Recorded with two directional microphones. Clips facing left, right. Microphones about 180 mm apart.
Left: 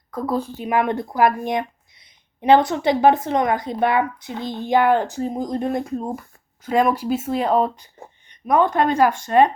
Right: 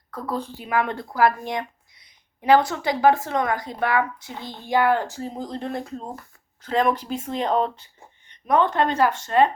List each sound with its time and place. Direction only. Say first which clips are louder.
0.3 s speech: left 4 dB; 10° left (ahead or behind)